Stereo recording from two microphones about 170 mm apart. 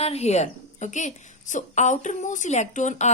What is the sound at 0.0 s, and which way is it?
A woman's voice, 40° left (ahead or behind).